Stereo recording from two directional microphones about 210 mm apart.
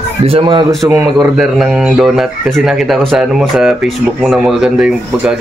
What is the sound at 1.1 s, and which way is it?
A man's voice, 5° right (ahead or behind).